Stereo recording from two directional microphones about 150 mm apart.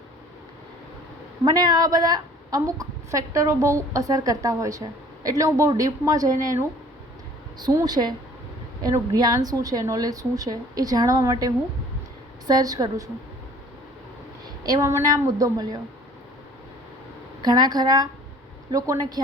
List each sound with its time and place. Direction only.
1.5 s a woman's voice: 30° right (ahead or behind)
14.4 s a woman's voice: 25° right (ahead or behind)
17.4 s a woman's voice: 25° right (ahead or behind)